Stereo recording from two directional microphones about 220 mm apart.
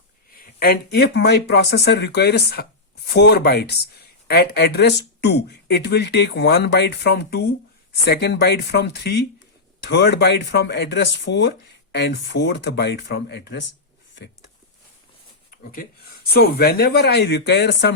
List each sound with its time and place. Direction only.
0.3 s speech: 45° left (ahead or behind)
15.4 s a sound: 40° left (ahead or behind)
16.3 s speech: 45° left (ahead or behind)